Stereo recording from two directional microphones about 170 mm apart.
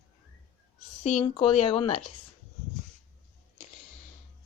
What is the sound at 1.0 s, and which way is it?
Speech, 40° left (ahead or behind).